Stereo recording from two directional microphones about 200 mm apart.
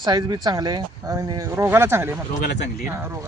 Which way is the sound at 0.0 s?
20° right (ahead or behind).